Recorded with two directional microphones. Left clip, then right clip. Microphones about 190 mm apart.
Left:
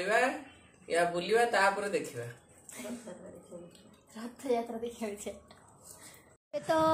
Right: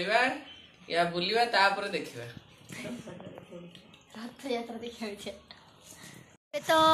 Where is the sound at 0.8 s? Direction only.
25° left (ahead or behind).